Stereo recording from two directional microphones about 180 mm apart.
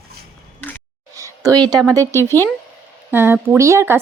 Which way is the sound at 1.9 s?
15° right (ahead or behind).